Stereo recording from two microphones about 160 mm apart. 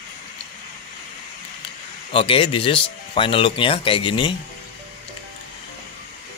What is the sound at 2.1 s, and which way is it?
Speech, 35° left (ahead or behind).